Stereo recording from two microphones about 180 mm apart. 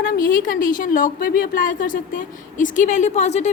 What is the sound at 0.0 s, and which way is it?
A woman's voice, 50° left (ahead or behind).